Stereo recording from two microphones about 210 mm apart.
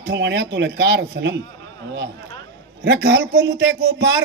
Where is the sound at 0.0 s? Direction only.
55° right (ahead or behind).